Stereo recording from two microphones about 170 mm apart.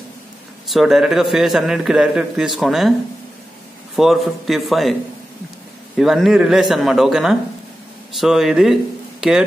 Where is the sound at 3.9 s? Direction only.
Centre (ahead or behind).